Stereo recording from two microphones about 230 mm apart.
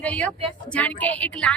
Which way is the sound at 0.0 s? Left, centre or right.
Centre.